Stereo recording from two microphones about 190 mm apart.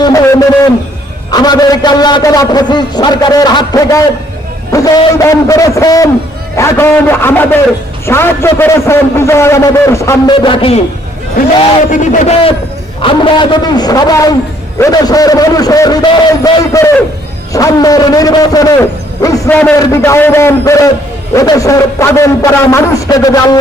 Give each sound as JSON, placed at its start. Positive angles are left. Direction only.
{"t": 0.0, "sound": "a sound", "side_deg": 20}
{"t": 1.3, "sound": "a man's voice", "side_deg": 20}
{"t": 10.3, "sound": "a man's voice", "side_deg": 25}
{"t": 11.9, "sound": "a man's voice", "side_deg": 40}